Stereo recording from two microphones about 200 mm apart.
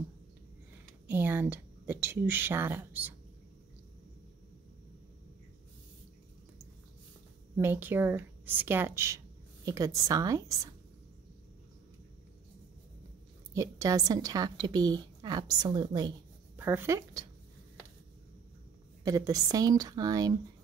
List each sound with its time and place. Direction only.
1.0 s a woman's voice: 10° right (ahead or behind)
7.5 s speech: 10° right (ahead or behind)
13.5 s a woman's voice: 15° right (ahead or behind)
16.5 s speech: 10° right (ahead or behind)
19.0 s a woman's voice: 15° right (ahead or behind)